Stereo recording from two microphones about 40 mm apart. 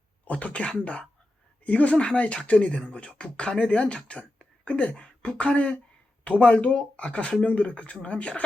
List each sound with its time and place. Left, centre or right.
0.3 s speech: left
5.0 s a sound: centre
5.4 s speech: left